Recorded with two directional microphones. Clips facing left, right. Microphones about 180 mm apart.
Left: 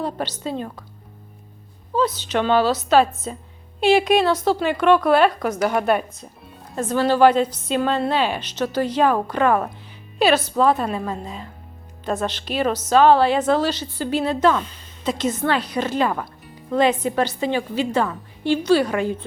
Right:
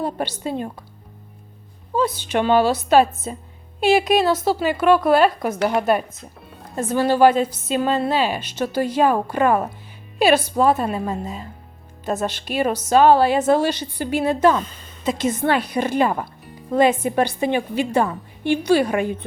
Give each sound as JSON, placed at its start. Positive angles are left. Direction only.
{"t": 0.0, "sound": "a woman's voice", "side_deg": -10}
{"t": 2.3, "sound": "a woman's voice", "side_deg": -10}
{"t": 14.6, "sound": "a woman's voice", "side_deg": -50}
{"t": 15.0, "sound": "a woman's voice", "side_deg": -10}